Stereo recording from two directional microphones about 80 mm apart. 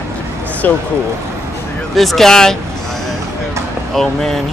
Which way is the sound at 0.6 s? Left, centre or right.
Centre.